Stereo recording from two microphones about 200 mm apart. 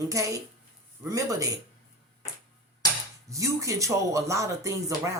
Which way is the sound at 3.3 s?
15° right (ahead or behind).